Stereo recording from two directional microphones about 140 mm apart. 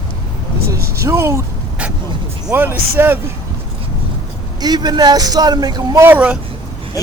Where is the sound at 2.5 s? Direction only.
15° right (ahead or behind).